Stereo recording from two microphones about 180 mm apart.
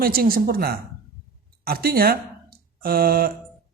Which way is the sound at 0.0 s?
55° right (ahead or behind).